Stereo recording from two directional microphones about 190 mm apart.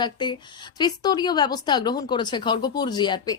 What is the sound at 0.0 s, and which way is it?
Speech, 25° left (ahead or behind).